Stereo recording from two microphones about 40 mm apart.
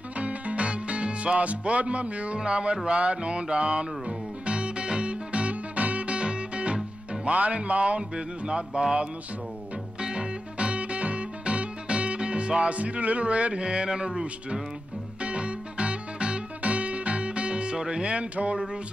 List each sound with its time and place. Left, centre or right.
0.2 s music: right
7.2 s speech: right
8.5 s mantra: right
9.9 s music: right
15.2 s music: right